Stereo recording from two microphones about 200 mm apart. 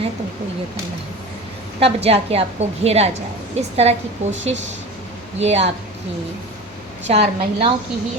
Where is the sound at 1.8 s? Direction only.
30° right (ahead or behind).